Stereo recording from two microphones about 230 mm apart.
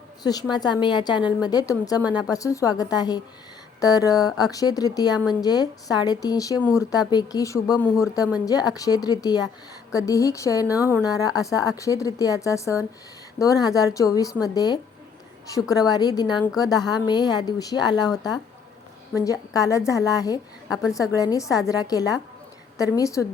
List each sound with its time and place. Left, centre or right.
0.2 s a woman's voice: centre